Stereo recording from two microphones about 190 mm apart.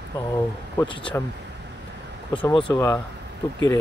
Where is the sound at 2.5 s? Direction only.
25° left (ahead or behind).